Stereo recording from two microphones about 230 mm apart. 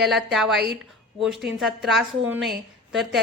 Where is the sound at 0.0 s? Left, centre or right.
Centre.